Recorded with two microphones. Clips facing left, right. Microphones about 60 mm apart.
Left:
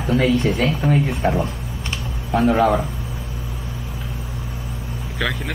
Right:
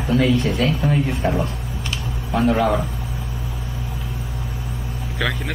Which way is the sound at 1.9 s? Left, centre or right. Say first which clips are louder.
Left 2 dB; left.